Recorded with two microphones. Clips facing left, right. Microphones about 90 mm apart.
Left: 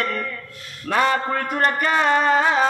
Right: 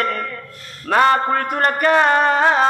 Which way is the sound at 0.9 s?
50° right (ahead or behind).